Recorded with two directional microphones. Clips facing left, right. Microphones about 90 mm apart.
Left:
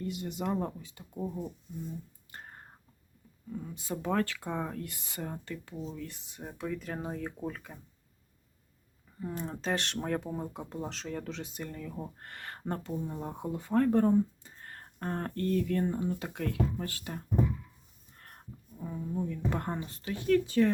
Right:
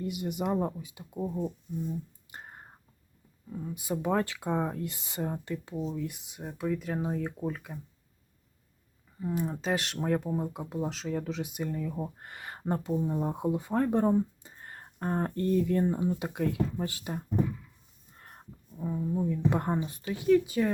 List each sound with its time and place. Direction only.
0.0 s speech: 15° right (ahead or behind)
2.3 s whispering: 15° right (ahead or behind)
3.5 s speech: 10° right (ahead or behind)
9.2 s speech: 5° right (ahead or behind)